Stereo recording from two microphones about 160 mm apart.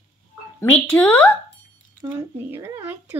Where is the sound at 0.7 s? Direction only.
10° left (ahead or behind).